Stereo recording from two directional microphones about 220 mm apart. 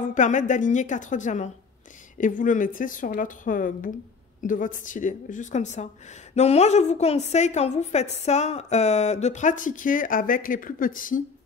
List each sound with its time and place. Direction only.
0.1 s a woman's voice: 35° left (ahead or behind)